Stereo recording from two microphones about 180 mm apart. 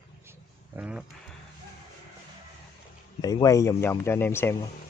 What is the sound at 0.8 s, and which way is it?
Speech, 5° right (ahead or behind).